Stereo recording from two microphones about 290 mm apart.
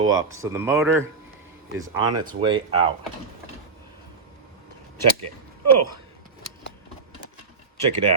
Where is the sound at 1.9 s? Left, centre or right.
Right.